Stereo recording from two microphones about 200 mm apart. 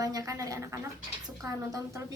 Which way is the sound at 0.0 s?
15° right (ahead or behind).